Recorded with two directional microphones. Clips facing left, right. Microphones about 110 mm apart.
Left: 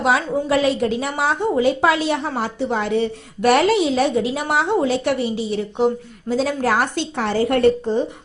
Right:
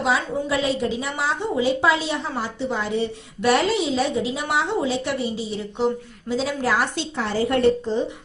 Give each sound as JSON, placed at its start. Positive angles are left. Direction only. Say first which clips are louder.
{"t": 0.0, "sound": "a woman's voice", "louder": "left 4 dB", "side_deg": 55}